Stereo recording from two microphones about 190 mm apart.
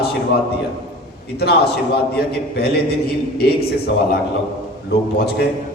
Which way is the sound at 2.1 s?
60° left (ahead or behind).